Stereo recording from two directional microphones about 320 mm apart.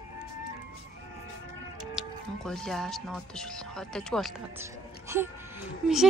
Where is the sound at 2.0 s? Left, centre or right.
Centre.